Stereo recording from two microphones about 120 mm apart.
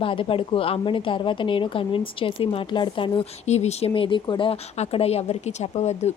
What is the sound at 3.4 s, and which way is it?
Speech, 70° left (ahead or behind).